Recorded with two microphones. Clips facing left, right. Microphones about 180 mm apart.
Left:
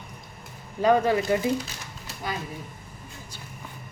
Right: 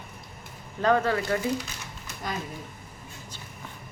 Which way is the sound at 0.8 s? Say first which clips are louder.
Left 3 dB; 15° left (ahead or behind).